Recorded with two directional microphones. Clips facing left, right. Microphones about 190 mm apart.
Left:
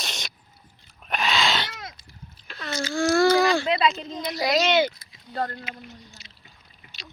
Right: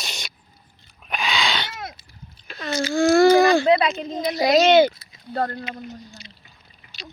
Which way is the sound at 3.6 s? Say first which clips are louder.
Right 5 dB; 55° right (ahead or behind).